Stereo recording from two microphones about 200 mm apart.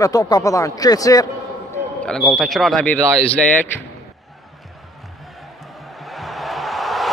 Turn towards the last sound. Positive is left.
turn(degrees=0)  # may be behind; listen again after turning